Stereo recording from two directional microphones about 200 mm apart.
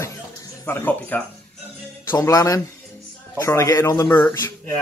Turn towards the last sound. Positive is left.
turn(degrees=10)  # may be behind; listen again after turning